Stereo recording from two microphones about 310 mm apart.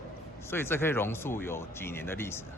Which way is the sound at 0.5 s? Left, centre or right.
Centre.